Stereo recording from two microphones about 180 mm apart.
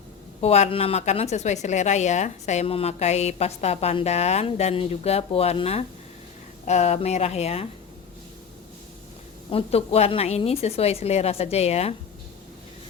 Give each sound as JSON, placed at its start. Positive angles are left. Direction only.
{"t": 0.4, "sound": "a woman's voice", "side_deg": 35}
{"t": 9.5, "sound": "a woman's voice", "side_deg": 35}